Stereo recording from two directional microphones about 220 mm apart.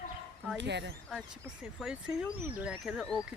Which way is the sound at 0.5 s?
50° right (ahead or behind).